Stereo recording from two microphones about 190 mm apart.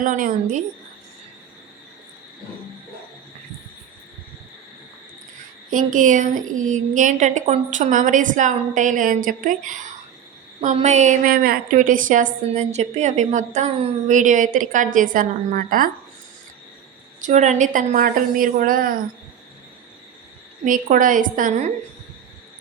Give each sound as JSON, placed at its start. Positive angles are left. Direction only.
{"t": 0.0, "sound": "a woman's voice", "side_deg": -45}
{"t": 5.7, "sound": "a woman's voice", "side_deg": -45}
{"t": 17.2, "sound": "a woman's voice", "side_deg": -40}
{"t": 20.7, "sound": "a woman's voice", "side_deg": -45}